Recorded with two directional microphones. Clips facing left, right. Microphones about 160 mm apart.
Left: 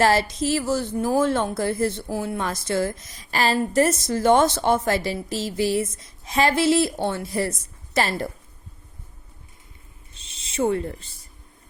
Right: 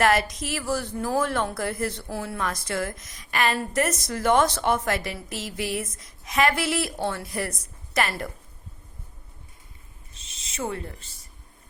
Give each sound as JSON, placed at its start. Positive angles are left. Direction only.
{"t": 0.0, "sound": "speech", "side_deg": 30}
{"t": 10.2, "sound": "speech", "side_deg": 30}